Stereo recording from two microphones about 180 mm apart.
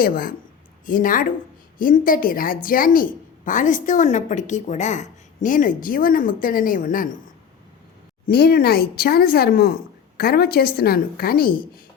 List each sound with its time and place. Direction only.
0.0 s a woman's voice: 55° left (ahead or behind)
8.3 s a woman's voice: 60° left (ahead or behind)